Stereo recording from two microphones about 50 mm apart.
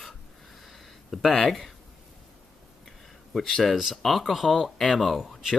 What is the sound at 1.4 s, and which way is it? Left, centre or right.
Speech, centre.